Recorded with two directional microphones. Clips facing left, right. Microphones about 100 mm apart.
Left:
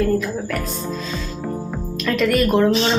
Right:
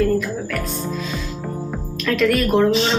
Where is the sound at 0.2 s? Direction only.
Centre (ahead or behind).